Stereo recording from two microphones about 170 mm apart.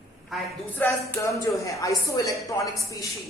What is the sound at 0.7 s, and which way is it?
A man's voice, 15° left (ahead or behind).